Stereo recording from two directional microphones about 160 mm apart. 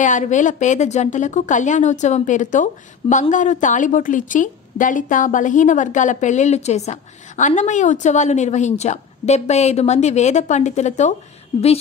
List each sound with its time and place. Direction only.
0.0 s a woman's voice: 50° left (ahead or behind)